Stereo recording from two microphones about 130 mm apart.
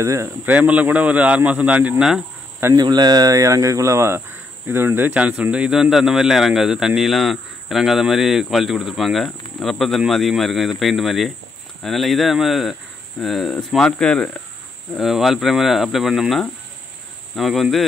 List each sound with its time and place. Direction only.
0.0 s speech: 25° right (ahead or behind)
0.5 s a man's voice: 10° right (ahead or behind)
2.7 s speech: 30° right (ahead or behind); by 17.8 s centre (ahead or behind)